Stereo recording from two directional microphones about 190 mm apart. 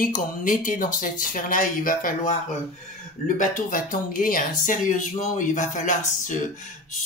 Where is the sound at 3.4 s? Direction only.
45° left (ahead or behind).